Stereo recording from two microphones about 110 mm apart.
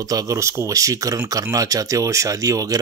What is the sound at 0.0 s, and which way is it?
Speech, 35° right (ahead or behind).